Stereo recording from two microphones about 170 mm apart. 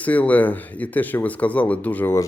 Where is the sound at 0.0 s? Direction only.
10° left (ahead or behind).